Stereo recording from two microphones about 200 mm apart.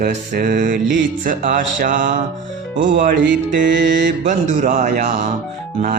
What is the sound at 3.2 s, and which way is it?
Music, 65° right (ahead or behind).